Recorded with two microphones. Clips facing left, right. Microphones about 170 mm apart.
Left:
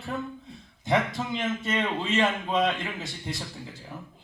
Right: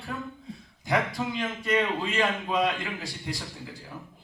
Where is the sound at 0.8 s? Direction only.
25° left (ahead or behind).